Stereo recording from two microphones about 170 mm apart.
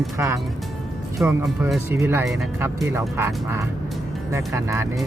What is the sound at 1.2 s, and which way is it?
Speech, 15° right (ahead or behind).